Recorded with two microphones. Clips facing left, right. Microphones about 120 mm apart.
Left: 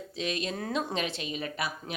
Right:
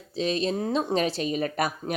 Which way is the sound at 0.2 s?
35° right (ahead or behind).